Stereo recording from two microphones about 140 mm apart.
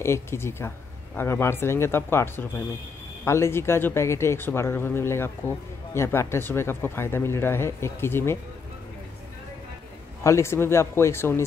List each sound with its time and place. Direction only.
0.0 s speech: 20° left (ahead or behind)
10.2 s speech: 20° left (ahead or behind)